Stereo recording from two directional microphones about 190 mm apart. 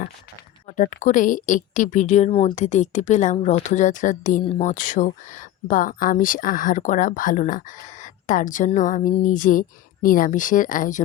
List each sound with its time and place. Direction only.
1.0 s a woman's voice: 45° left (ahead or behind)